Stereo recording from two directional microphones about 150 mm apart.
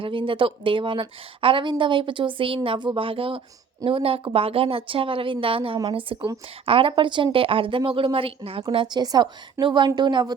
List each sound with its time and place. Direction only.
0.0 s a woman's voice: 35° right (ahead or behind)